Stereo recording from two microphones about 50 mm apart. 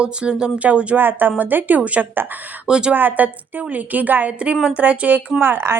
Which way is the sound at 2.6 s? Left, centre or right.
Centre.